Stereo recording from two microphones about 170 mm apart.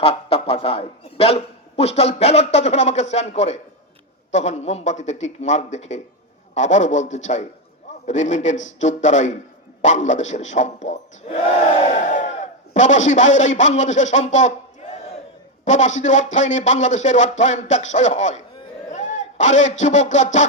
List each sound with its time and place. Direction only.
0.0 s a man's voice: 35° left (ahead or behind)
18.9 s a sound: 45° left (ahead or behind)
19.8 s speech: 45° left (ahead or behind)